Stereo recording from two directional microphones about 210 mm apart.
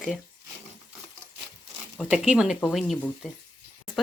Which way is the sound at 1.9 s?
5° right (ahead or behind).